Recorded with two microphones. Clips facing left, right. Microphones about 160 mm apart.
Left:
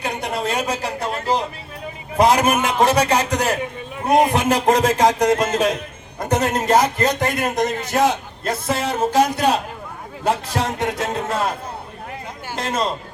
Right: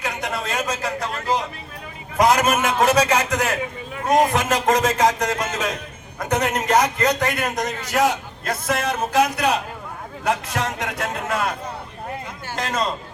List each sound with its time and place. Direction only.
0.0 s a man's voice: 30° left (ahead or behind)